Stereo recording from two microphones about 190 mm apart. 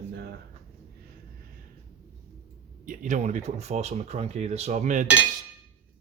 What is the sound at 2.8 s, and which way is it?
Speech, 40° right (ahead or behind).